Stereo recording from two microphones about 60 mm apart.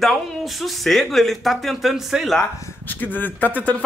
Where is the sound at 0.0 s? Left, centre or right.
Centre.